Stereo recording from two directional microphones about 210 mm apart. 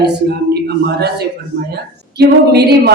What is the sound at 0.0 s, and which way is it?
A woman's voice, 50° right (ahead or behind).